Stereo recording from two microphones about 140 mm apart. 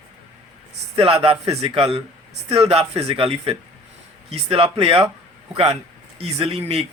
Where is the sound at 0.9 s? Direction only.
40° right (ahead or behind).